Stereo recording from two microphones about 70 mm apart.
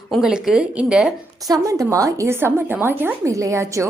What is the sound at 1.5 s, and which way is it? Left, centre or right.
A woman's voice, right.